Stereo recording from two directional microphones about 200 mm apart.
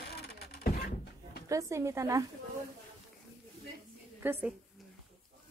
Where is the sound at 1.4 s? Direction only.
15° right (ahead or behind).